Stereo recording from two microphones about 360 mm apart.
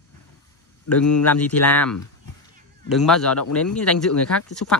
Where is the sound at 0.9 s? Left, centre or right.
Centre.